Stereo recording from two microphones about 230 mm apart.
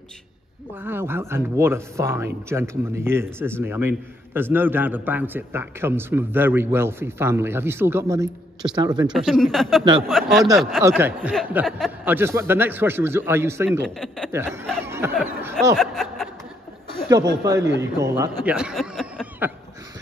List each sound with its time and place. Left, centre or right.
0.8 s speech: centre
9.0 s speech: centre
13.8 s speech: centre
14.3 s speech: centre
15.7 s speech: centre
17.4 s speech: centre